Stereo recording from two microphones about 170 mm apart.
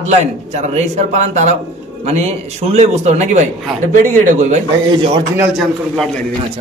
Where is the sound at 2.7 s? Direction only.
40° right (ahead or behind).